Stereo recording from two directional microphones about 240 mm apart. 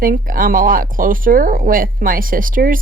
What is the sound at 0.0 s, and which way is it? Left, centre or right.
Speech, right.